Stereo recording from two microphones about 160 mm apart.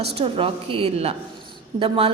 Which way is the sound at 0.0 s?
40° right (ahead or behind).